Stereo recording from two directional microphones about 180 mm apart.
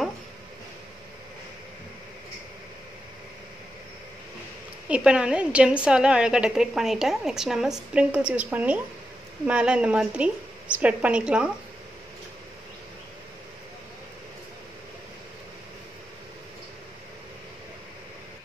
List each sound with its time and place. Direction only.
4.8 s a woman's voice: 5° right (ahead or behind)